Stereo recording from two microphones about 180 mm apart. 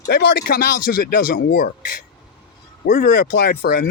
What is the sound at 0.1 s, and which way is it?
Speech, 65° left (ahead or behind).